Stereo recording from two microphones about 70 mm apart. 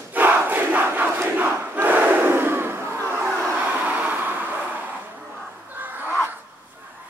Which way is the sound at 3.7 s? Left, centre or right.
Right.